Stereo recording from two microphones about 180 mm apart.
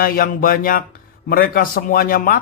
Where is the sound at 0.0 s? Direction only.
55° left (ahead or behind).